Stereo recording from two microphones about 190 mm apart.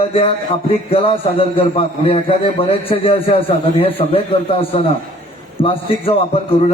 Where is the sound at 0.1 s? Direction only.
30° left (ahead or behind).